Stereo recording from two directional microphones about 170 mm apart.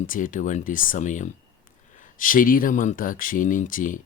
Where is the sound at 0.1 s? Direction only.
50° left (ahead or behind).